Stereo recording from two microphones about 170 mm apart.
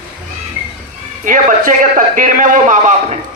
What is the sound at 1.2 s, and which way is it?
A man's voice, 50° right (ahead or behind).